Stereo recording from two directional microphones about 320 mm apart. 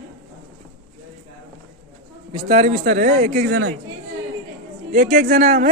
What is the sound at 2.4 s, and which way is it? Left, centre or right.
A man's voice, centre.